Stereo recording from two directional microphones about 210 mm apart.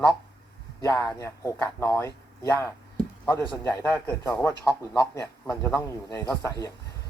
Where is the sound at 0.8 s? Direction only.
15° left (ahead or behind).